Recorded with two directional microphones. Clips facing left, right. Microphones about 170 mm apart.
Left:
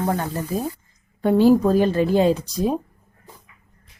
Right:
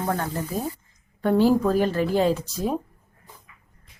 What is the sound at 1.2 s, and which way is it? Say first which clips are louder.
Speech: left 4 dB; 15° left (ahead or behind).